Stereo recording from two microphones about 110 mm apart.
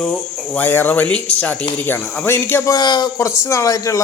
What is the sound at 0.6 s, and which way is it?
Speech, 15° left (ahead or behind).